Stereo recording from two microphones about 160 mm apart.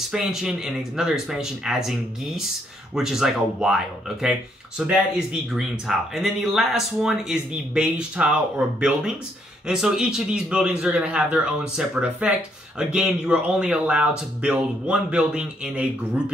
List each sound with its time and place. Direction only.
0.1 s speech: 5° right (ahead or behind)